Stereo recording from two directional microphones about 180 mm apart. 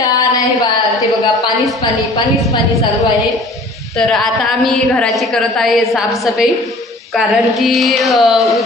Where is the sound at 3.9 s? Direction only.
Centre (ahead or behind).